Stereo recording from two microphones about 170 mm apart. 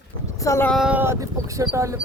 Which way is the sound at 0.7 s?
5° right (ahead or behind).